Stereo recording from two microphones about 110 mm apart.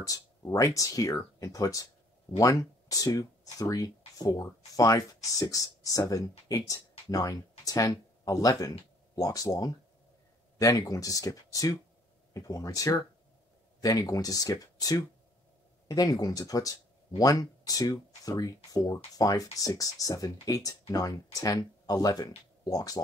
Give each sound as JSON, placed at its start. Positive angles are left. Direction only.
{"t": 0.0, "sound": "speech", "side_deg": 30}